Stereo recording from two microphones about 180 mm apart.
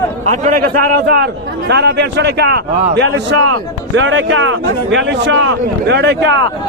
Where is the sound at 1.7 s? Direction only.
70° right (ahead or behind).